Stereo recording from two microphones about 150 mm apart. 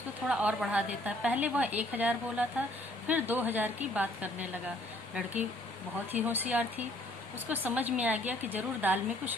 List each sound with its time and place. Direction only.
0.3 s a woman's voice: 5° right (ahead or behind)